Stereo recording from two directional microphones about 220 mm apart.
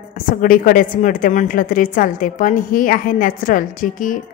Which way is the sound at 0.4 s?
40° left (ahead or behind).